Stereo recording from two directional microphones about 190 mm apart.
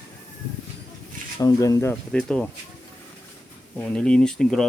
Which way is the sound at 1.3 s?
20° left (ahead or behind).